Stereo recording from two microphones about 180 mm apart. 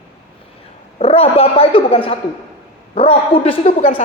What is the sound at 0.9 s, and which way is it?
Speech, 35° left (ahead or behind).